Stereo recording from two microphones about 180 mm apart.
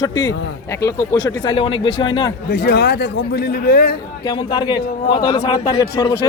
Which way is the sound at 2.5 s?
70° left (ahead or behind).